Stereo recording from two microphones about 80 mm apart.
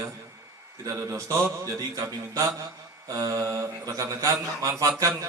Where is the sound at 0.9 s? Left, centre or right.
Right.